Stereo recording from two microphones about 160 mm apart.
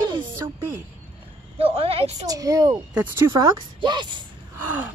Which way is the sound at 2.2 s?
20° right (ahead or behind).